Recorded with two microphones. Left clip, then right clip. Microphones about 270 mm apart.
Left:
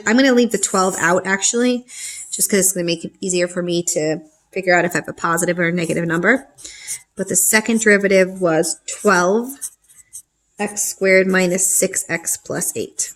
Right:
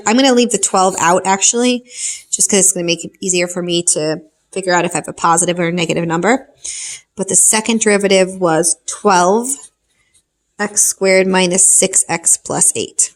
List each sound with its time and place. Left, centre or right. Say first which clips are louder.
0.0 s speech: right 3 dB; centre
10.8 s speech: right 1 dB; centre